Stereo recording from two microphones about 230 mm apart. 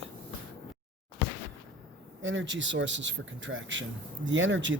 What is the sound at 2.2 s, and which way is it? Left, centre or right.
Speech, right.